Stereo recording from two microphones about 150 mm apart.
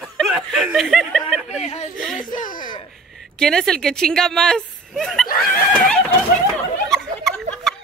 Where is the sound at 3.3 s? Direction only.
5° left (ahead or behind).